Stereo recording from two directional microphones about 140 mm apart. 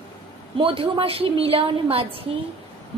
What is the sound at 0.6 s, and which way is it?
A woman's voice, 40° right (ahead or behind).